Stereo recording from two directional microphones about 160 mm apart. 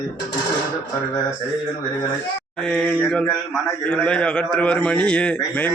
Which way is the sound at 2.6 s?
5° left (ahead or behind).